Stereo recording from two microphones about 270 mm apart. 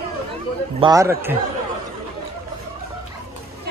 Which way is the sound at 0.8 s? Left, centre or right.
Centre.